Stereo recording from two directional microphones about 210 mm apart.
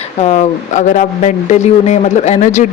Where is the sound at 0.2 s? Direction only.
30° left (ahead or behind).